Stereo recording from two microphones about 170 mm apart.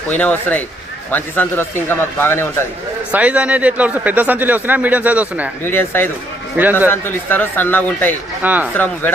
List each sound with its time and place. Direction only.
0.1 s speech: 10° left (ahead or behind)
3.1 s speech: 10° right (ahead or behind)
5.6 s speech: 10° left (ahead or behind)
6.6 s speech: 10° right (ahead or behind)
6.8 s speech: 15° left (ahead or behind)
8.4 s speech: 10° right (ahead or behind)
8.7 s speech: 10° left (ahead or behind)